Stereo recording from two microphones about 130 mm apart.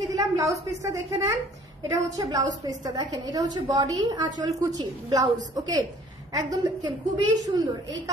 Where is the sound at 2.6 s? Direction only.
30° right (ahead or behind).